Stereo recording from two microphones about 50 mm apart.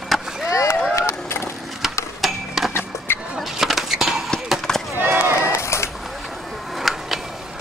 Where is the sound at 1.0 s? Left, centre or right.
Left.